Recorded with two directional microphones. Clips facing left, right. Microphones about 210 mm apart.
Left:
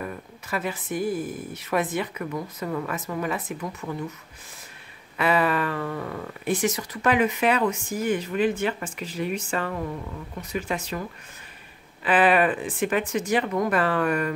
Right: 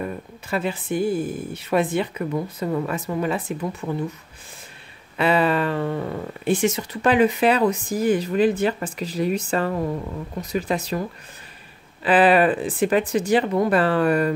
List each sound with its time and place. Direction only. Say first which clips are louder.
0.0 s speech: right 5 dB; 25° right (ahead or behind)
5.1 s speech: right 3 dB; 30° right (ahead or behind)